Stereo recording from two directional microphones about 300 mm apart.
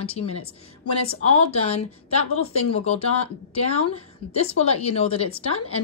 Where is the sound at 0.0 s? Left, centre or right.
Centre.